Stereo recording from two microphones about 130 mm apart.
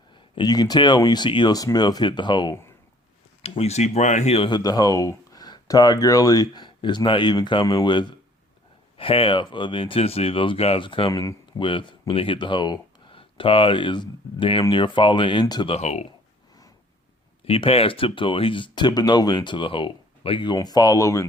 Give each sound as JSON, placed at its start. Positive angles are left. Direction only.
{"t": 0.1, "sound": "speech", "side_deg": 35}
{"t": 3.4, "sound": "speech", "side_deg": 50}
{"t": 4.4, "sound": "speech", "side_deg": 35}
{"t": 11.1, "sound": "speech", "side_deg": 25}
{"t": 11.6, "sound": "speech", "side_deg": 40}
{"t": 15.7, "sound": "speech", "side_deg": 60}
{"t": 17.4, "sound": "speech", "side_deg": 50}